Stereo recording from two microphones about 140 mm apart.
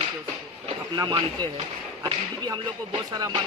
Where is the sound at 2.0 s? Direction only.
30° right (ahead or behind).